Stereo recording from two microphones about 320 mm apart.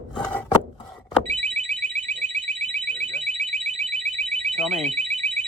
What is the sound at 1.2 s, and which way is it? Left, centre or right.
Alarm, right.